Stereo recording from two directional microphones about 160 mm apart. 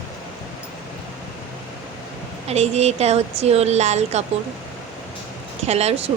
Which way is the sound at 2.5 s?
40° right (ahead or behind).